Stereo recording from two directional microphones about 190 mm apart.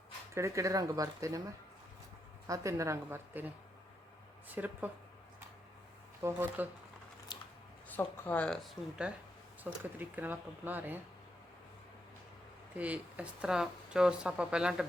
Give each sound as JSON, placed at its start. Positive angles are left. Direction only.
{"t": 0.3, "sound": "speech", "side_deg": -15}
{"t": 2.5, "sound": "speech", "side_deg": -15}
{"t": 6.2, "sound": "speech", "side_deg": -10}
{"t": 7.3, "sound": "scissors", "side_deg": 25}
{"t": 7.9, "sound": "speech", "side_deg": 10}
{"t": 12.7, "sound": "speech", "side_deg": -5}